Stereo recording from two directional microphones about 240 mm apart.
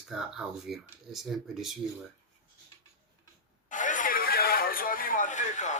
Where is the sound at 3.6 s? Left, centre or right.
Left.